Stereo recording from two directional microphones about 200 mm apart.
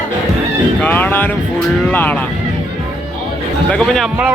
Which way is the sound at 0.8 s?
10° left (ahead or behind).